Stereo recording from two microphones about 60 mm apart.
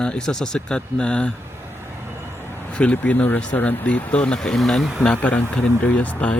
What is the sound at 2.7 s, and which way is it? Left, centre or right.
Speech, left.